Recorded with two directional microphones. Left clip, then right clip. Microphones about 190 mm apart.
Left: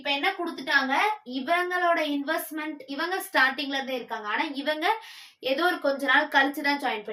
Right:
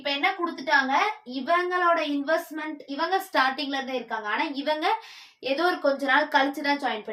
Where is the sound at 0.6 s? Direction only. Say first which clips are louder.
Right 1 dB; 10° right (ahead or behind).